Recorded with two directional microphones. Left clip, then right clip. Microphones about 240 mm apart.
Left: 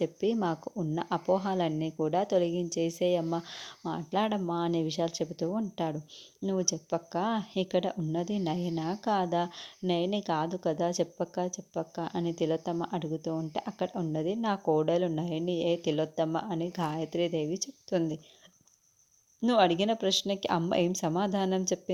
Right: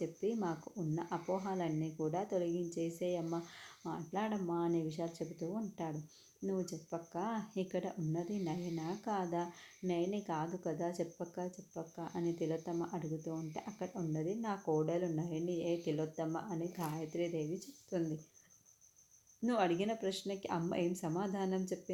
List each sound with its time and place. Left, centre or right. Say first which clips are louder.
0.0 s speech: left 9 dB; left
19.4 s speech: left 9 dB; left